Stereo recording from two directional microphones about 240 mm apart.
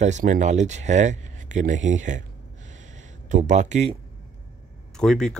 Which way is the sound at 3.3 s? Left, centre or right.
Right.